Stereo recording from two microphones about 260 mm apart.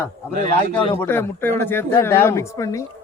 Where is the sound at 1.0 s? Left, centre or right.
Centre.